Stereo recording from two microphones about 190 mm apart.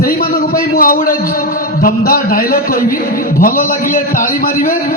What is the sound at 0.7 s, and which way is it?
A man's voice, 45° left (ahead or behind).